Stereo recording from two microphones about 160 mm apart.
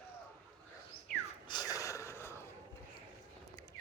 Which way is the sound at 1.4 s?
25° left (ahead or behind).